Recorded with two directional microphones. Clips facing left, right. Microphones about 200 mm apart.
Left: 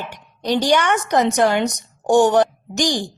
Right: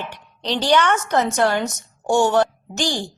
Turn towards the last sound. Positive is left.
turn(degrees=15)  # may be behind; listen again after turning